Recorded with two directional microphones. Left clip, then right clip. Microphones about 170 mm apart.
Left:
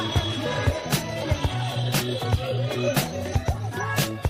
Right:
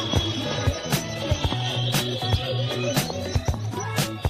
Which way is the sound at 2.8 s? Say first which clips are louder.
Left 2 dB; centre (ahead or behind).